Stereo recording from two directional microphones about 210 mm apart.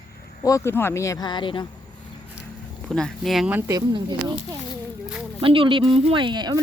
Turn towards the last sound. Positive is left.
turn(degrees=-20)  # may be behind; listen again after turning